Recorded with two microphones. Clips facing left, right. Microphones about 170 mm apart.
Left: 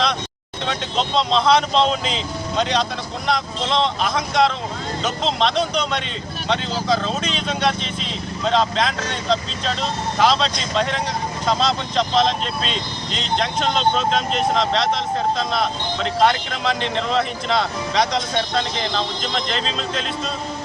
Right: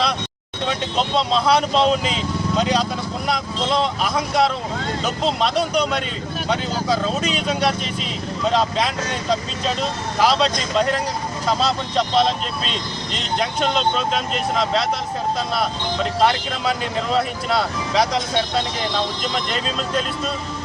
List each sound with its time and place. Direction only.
0.7 s speech: 10° right (ahead or behind)
16.2 s speech: 5° right (ahead or behind)